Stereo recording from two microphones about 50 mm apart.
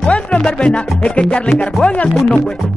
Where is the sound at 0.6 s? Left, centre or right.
Left.